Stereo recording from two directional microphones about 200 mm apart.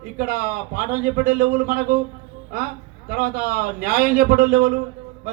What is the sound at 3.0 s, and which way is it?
A man's voice, 45° right (ahead or behind).